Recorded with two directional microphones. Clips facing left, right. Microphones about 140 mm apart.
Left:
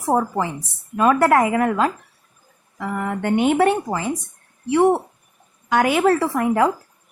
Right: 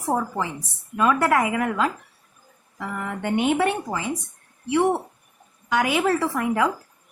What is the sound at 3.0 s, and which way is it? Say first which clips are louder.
A woman's voice: left 4 dB; 50° left (ahead or behind).